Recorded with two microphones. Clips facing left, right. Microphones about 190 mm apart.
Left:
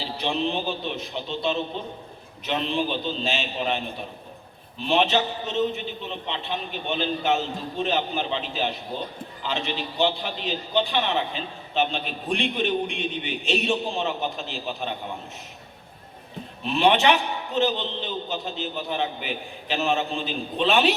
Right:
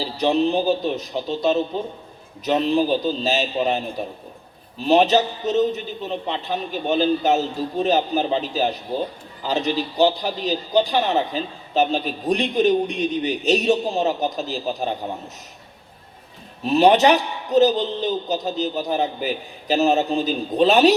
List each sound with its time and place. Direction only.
0.0 s a man's voice: 40° right (ahead or behind)
16.6 s a man's voice: 40° right (ahead or behind)